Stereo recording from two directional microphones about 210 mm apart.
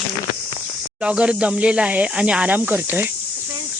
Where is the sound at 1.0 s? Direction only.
5° right (ahead or behind).